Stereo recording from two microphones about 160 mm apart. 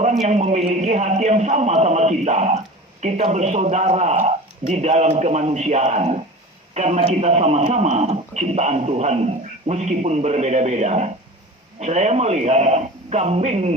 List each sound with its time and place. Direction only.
0.0 s speech: 45° right (ahead or behind)